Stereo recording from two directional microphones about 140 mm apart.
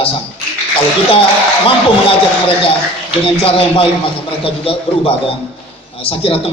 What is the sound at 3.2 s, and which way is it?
A man's voice, 40° left (ahead or behind).